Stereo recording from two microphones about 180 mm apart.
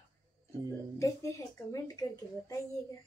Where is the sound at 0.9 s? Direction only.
15° left (ahead or behind).